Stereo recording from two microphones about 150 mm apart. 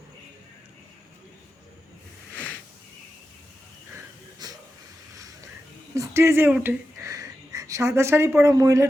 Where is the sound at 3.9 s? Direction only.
25° right (ahead or behind).